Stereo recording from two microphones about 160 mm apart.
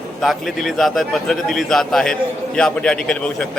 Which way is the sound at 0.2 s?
Centre (ahead or behind).